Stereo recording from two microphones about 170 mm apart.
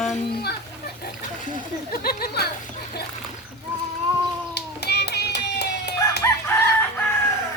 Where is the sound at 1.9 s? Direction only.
60° left (ahead or behind).